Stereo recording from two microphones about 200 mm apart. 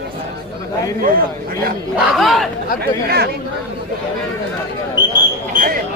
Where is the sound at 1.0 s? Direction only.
45° right (ahead or behind).